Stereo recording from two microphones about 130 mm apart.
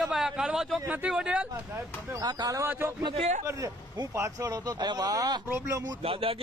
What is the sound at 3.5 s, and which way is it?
Speech, 25° right (ahead or behind).